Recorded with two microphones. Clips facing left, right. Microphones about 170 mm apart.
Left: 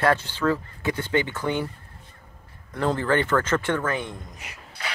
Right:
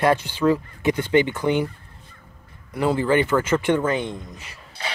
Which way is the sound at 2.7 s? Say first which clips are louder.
Right 3 dB; 10° right (ahead or behind).